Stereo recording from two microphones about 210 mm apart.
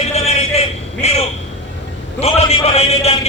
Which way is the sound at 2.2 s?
30° left (ahead or behind).